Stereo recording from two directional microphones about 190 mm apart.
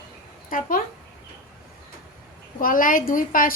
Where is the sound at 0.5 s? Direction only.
45° left (ahead or behind).